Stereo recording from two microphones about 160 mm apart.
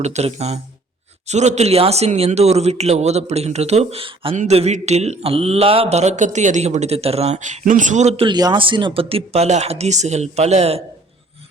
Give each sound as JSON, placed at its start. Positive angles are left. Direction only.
{"t": 0.0, "sound": "speech", "side_deg": -45}